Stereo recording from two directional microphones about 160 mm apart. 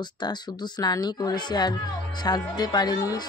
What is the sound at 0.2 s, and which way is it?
A woman's voice, 25° left (ahead or behind).